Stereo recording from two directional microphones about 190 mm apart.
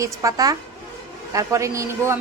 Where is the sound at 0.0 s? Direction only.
15° right (ahead or behind).